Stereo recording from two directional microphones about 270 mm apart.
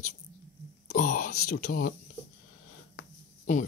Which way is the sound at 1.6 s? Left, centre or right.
Left.